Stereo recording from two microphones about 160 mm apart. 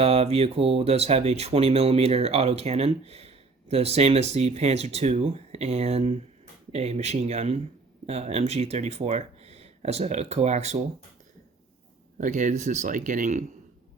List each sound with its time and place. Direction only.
0.0 s speech: 40° right (ahead or behind)
12.1 s speech: 55° right (ahead or behind)